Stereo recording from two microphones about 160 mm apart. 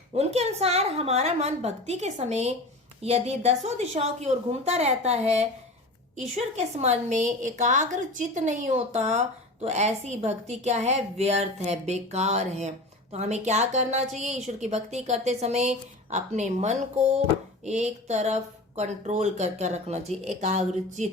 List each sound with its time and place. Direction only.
0.1 s a woman's voice: 40° right (ahead or behind)